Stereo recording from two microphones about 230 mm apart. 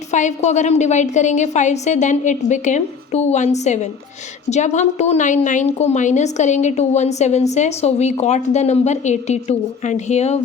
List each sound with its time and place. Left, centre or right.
0.1 s a woman's voice: left